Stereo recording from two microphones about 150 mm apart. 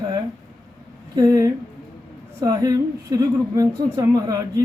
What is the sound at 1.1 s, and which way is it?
A woman's voice, 25° right (ahead or behind).